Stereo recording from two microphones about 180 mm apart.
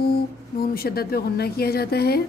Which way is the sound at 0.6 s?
55° left (ahead or behind).